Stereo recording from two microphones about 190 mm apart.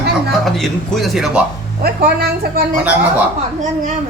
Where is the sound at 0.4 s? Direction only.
Centre (ahead or behind).